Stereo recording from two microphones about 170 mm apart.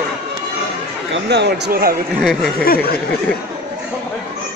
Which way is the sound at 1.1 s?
85° right.